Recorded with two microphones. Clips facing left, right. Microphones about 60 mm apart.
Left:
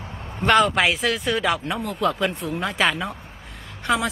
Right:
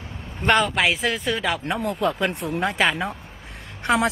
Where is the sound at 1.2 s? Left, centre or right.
Centre.